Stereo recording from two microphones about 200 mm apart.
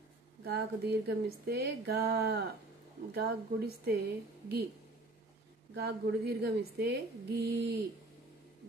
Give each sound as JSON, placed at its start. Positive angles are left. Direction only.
{"t": 0.5, "sound": "a woman's voice", "side_deg": -55}
{"t": 5.8, "sound": "speech", "side_deg": -55}